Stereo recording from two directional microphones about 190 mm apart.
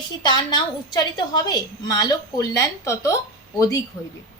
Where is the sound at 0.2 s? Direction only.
20° left (ahead or behind).